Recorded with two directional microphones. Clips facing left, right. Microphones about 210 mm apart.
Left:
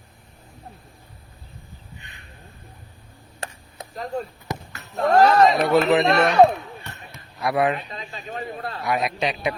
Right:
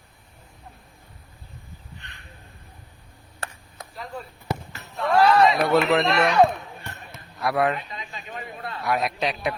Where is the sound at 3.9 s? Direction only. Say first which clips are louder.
Left 8 dB; 40° left (ahead or behind).